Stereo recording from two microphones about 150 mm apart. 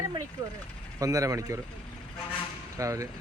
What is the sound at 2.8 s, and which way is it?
Speech, 20° right (ahead or behind).